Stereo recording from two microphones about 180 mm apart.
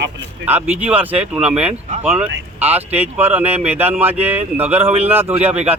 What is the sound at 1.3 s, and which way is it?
Speech, 5° right (ahead or behind).